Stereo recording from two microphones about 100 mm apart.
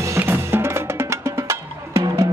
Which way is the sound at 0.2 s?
25° right (ahead or behind).